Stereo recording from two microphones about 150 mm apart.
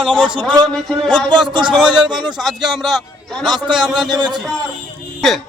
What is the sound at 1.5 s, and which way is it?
Speech, 30° right (ahead or behind).